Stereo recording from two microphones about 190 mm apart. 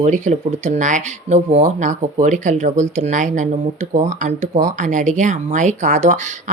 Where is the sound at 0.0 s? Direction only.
40° right (ahead or behind).